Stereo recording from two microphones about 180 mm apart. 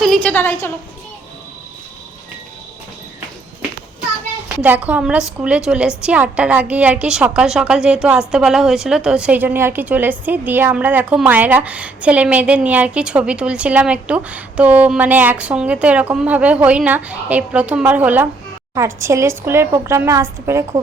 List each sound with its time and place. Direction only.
0.0 s a woman's voice: 5° left (ahead or behind)
4.4 s a woman's voice: 10° right (ahead or behind)